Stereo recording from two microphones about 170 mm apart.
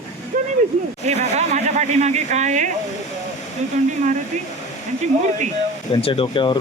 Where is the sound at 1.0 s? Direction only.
40° right (ahead or behind).